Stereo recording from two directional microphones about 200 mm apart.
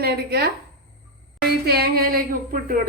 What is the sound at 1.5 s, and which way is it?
A woman's voice, 50° right (ahead or behind).